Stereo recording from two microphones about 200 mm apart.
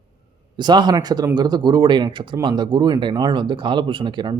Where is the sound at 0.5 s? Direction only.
20° right (ahead or behind).